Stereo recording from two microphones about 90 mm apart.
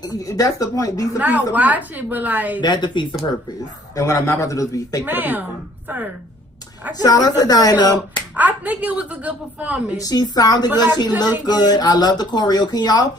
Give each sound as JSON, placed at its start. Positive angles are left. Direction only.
{"t": 0.1, "sound": "speech", "side_deg": 40}
{"t": 1.2, "sound": "a woman's voice", "side_deg": -15}
{"t": 2.6, "sound": "speech", "side_deg": 55}
{"t": 3.9, "sound": "a man's voice", "side_deg": 35}
{"t": 5.0, "sound": "a woman's voice", "side_deg": -20}
{"t": 7.0, "sound": "speech", "side_deg": 45}
{"t": 8.4, "sound": "a woman's voice", "side_deg": -20}
{"t": 9.9, "sound": "speech", "side_deg": 45}